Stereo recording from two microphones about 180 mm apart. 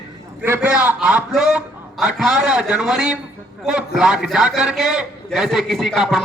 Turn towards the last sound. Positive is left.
turn(degrees=0)  # may be behind; listen again after turning